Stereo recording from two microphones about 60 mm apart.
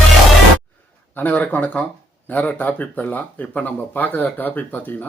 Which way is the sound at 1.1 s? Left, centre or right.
Left.